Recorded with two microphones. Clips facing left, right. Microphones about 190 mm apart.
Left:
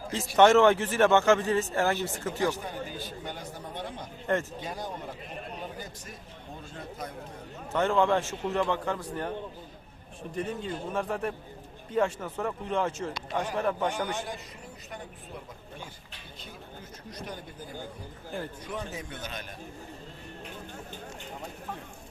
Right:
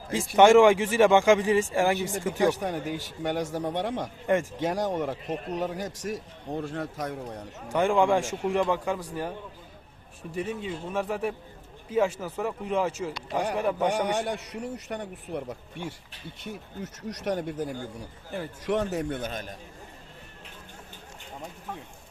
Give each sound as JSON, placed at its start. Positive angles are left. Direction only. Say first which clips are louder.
{"t": 0.1, "sound": "speech", "louder": "right 3 dB", "side_deg": -10}
{"t": 2.5, "sound": "a man's voice", "louder": "right 6 dB", "side_deg": -70}
{"t": 7.7, "sound": "speech", "louder": "right 2 dB", "side_deg": -10}
{"t": 10.3, "sound": "speech", "louder": "right 1 dB", "side_deg": -5}
{"t": 13.9, "sound": "a man's voice", "louder": "right 6 dB", "side_deg": -70}